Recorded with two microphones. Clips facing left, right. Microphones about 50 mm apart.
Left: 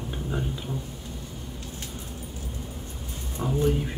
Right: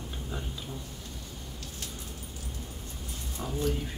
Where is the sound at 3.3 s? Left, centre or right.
Left.